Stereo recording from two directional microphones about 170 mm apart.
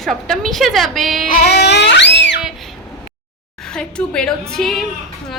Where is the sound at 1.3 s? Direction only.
70° left (ahead or behind); by 2.4 s 90° left.